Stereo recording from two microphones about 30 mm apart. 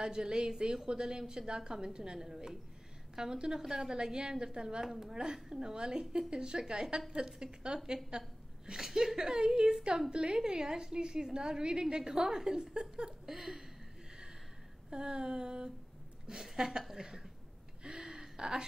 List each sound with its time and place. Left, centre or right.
0.0 s a woman's voice: right
2.1 s speech: centre
3.2 s a woman's voice: right
3.9 s a woman's voice: right
4.8 s speech: centre
5.1 s a woman's voice: right
8.7 s a woman's voice: centre
13.3 s speech: centre
14.9 s a woman's voice: right
16.5 s a woman's voice: centre
17.8 s a sound: centre
18.4 s a woman's voice: right